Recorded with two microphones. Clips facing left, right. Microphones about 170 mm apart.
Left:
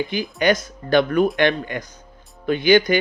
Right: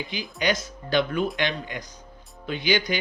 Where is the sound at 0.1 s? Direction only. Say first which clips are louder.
Left 4 dB; 55° left (ahead or behind).